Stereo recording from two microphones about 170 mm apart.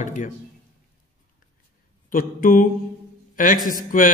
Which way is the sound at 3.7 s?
50° left (ahead or behind).